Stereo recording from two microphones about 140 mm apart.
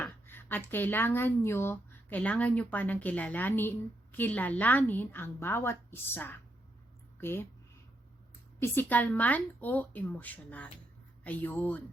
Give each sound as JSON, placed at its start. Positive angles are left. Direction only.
{"t": 0.0, "sound": "a woman's voice", "side_deg": 15}
{"t": 8.6, "sound": "a woman's voice", "side_deg": 15}